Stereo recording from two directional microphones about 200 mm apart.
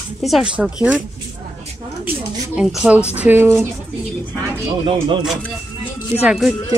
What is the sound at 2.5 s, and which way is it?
Speech, 5° right (ahead or behind).